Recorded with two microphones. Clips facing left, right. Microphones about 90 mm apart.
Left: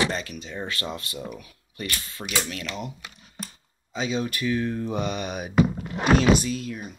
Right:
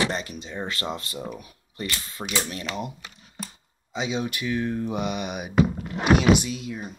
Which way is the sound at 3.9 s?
15° right (ahead or behind).